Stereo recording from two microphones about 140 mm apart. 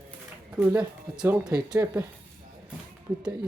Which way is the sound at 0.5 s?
15° right (ahead or behind).